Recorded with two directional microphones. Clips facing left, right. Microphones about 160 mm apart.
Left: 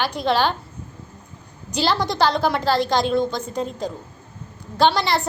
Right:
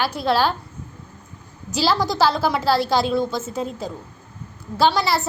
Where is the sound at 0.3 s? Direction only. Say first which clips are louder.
Even; 5° right (ahead or behind).